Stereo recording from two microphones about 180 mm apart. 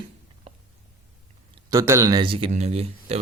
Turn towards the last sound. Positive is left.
turn(degrees=-35)  # may be behind; listen again after turning